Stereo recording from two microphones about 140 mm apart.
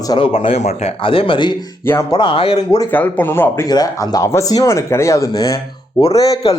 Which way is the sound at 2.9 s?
15° left (ahead or behind).